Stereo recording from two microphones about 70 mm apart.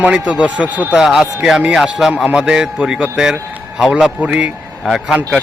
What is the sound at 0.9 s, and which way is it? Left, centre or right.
Speech, centre.